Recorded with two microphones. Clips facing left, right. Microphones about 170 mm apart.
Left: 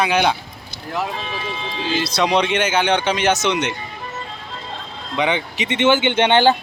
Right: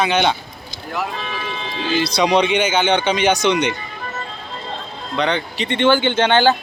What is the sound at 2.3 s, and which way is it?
Speech, 5° right (ahead or behind).